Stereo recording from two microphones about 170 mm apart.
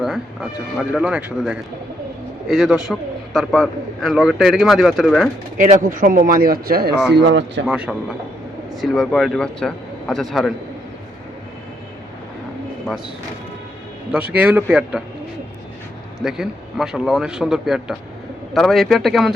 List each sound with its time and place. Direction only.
0.8 s a man's voice: 5° right (ahead or behind)
5.5 s speech: 50° right (ahead or behind); by 7.6 s 90° right
7.7 s a man's voice: 5° right (ahead or behind)
14.3 s a man's voice: 10° right (ahead or behind)
16.2 s a man's voice: 5° right (ahead or behind)